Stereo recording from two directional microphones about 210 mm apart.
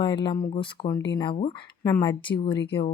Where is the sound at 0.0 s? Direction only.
20° left (ahead or behind).